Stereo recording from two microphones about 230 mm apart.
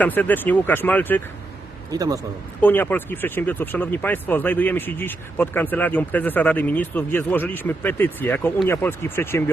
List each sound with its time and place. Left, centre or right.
0.0 s speech: centre
1.9 s a man's voice: centre
2.6 s speech: centre